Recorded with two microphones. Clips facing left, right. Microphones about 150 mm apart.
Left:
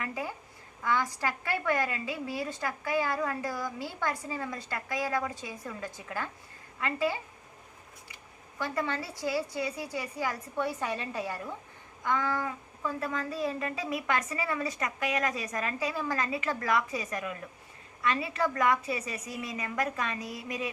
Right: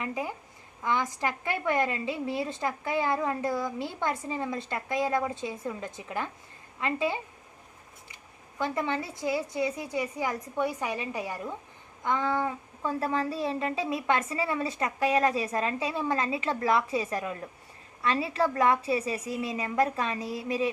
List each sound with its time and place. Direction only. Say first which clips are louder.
0.0 s a woman's voice: right 3 dB; 20° right (ahead or behind)
8.5 s a woman's voice: right 3 dB; 20° right (ahead or behind)